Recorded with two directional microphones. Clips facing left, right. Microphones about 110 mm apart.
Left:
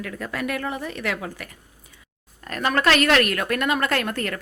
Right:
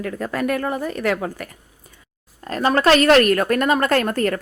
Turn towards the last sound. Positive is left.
turn(degrees=-40)  # may be behind; listen again after turning